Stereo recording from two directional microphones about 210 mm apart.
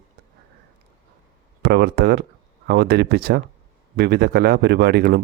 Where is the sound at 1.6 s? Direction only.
50° right (ahead or behind).